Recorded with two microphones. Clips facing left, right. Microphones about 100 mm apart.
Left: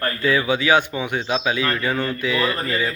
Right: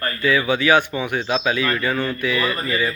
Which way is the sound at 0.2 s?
15° left (ahead or behind).